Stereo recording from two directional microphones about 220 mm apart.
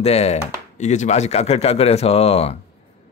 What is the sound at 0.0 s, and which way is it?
Speech, 30° left (ahead or behind).